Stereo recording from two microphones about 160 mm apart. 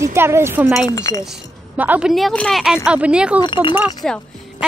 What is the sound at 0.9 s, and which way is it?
Speech, 20° left (ahead or behind).